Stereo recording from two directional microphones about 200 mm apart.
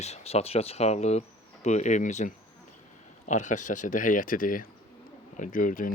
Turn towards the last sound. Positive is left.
turn(degrees=40)  # may be behind; listen again after turning